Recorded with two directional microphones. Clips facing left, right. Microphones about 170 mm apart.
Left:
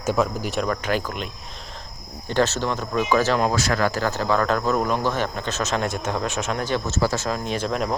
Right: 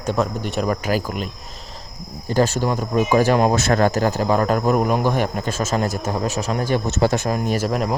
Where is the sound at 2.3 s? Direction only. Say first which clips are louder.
Right 3 dB; 10° right (ahead or behind).